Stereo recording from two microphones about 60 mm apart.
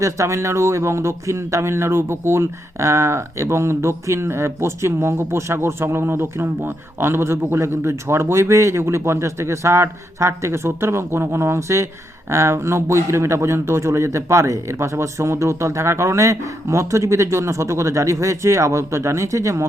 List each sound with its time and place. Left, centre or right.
0.0 s speech: right